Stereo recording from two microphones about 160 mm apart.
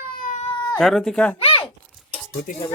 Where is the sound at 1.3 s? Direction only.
35° left (ahead or behind).